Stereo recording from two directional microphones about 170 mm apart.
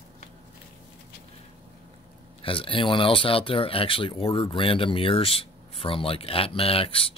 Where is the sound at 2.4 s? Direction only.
30° left (ahead or behind).